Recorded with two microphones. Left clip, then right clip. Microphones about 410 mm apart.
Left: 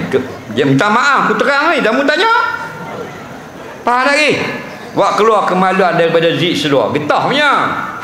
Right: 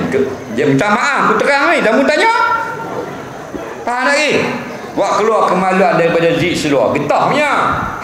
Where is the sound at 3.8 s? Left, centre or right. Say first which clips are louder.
Left 3 dB; left.